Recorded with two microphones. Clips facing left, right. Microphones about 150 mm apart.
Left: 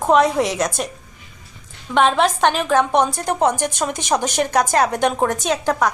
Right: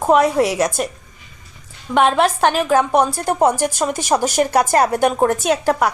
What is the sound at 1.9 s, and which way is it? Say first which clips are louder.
Speech: right 1 dB; 5° right (ahead or behind).